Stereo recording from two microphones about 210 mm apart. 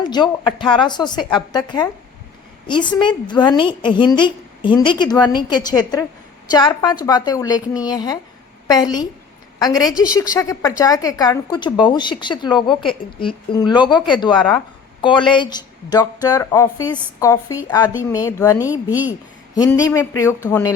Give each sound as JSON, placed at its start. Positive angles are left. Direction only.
{"t": 0.0, "sound": "a woman's voice", "side_deg": 20}